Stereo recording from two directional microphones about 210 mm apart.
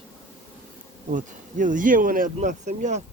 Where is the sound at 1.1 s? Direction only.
35° right (ahead or behind).